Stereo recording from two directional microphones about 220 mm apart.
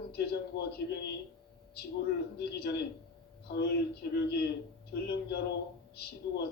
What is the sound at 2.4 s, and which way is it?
A man's voice, 50° left (ahead or behind).